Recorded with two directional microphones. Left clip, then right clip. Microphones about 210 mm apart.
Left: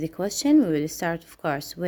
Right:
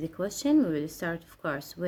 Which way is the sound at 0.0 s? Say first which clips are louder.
Left 5 dB; 30° left (ahead or behind).